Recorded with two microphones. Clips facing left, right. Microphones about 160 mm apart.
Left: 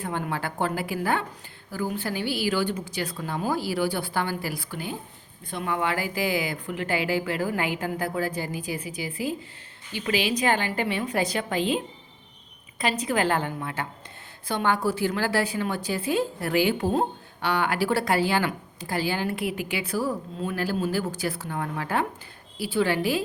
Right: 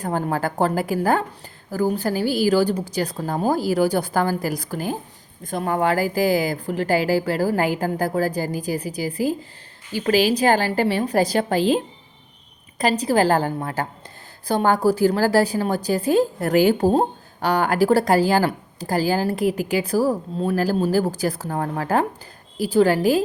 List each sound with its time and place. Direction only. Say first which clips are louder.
0.0 s a woman's voice: right 6 dB; 40° right (ahead or behind)
12.8 s a woman's voice: right 6 dB; 35° right (ahead or behind)